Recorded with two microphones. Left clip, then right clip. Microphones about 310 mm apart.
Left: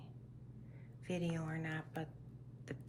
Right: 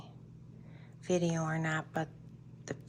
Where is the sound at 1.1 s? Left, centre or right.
Centre.